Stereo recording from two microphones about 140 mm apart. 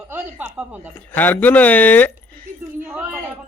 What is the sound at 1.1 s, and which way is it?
Speech, 15° left (ahead or behind).